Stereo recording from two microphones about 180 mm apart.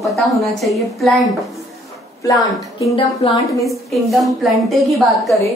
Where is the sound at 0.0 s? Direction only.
Centre (ahead or behind).